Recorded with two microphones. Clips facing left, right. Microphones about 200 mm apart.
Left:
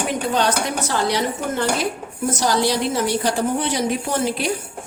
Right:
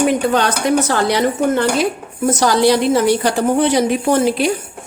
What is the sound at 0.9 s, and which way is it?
Speech, 60° right (ahead or behind).